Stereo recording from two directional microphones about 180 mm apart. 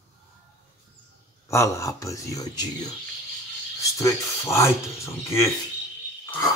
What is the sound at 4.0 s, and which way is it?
A woman's voice, 15° left (ahead or behind).